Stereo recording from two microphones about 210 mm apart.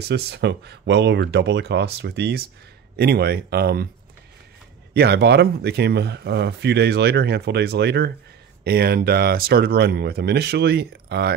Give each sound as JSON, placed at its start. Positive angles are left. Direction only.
{"t": 0.1, "sound": "speech", "side_deg": -55}
{"t": 4.9, "sound": "speech", "side_deg": -50}